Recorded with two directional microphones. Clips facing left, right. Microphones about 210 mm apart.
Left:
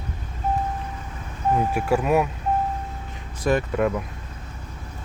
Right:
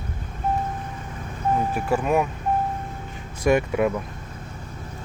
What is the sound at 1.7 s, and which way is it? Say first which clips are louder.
Speech: left 2 dB; 5° left (ahead or behind).